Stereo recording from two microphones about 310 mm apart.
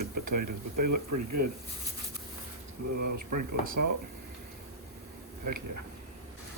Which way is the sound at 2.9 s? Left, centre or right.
Right.